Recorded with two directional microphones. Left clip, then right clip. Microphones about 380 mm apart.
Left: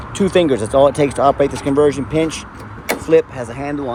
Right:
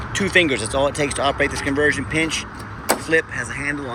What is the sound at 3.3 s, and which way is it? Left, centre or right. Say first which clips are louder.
Speech: even; left.